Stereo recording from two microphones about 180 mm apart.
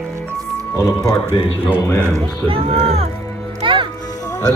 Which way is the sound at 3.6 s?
30° right (ahead or behind).